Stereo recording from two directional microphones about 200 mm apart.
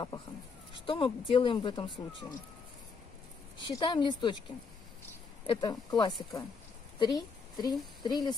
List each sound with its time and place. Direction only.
0.8 s speech: 25° left (ahead or behind)
3.5 s speech: 25° left (ahead or behind)
5.5 s a woman's voice: 20° left (ahead or behind)